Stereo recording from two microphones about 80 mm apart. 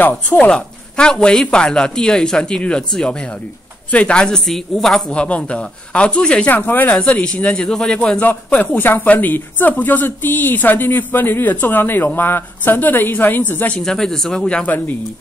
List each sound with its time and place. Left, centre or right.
0.0 s speech: left
0.5 s a man's voice: centre
6.5 s a man's voice: left
8.2 s speech: left
13.7 s a man's voice: centre